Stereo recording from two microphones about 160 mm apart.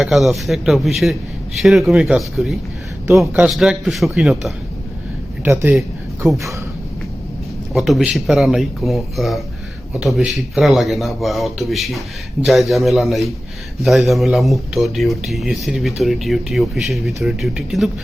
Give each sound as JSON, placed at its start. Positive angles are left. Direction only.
{"t": 0.0, "sound": "speech", "side_deg": 0}
{"t": 7.7, "sound": "speech", "side_deg": 0}